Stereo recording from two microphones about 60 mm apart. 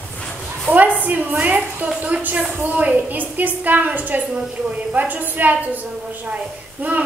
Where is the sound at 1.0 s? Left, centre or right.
Right.